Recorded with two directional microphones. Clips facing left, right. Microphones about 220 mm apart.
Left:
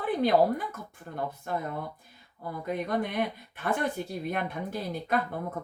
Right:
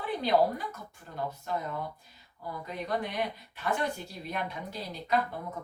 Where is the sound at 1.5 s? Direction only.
55° left (ahead or behind).